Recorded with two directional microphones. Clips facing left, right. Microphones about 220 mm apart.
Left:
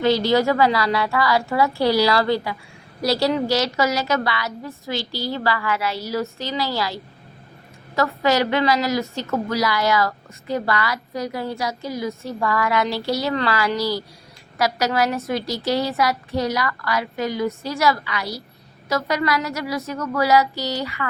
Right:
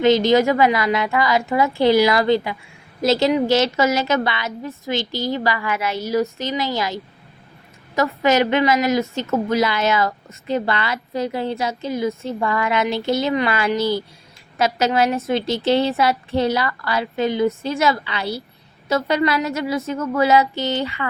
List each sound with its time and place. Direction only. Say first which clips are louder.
0.0 s a woman's voice: right 3 dB; 20° right (ahead or behind)